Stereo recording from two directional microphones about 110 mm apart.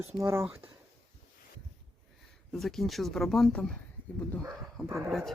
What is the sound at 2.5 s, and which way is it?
Speech, centre (ahead or behind).